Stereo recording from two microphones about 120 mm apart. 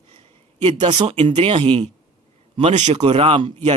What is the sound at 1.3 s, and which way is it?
Speech, 55° right (ahead or behind).